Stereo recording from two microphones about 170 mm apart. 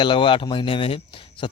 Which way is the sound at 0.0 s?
30° left (ahead or behind).